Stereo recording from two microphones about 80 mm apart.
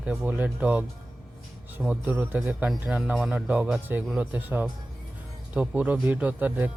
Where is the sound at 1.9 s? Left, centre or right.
Right.